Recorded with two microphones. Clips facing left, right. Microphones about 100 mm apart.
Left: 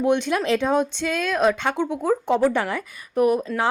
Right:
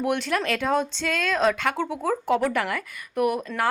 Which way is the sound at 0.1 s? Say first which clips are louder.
Left 6 dB; 20° left (ahead or behind).